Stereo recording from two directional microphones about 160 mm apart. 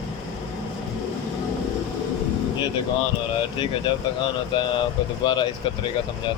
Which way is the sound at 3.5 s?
30° left (ahead or behind).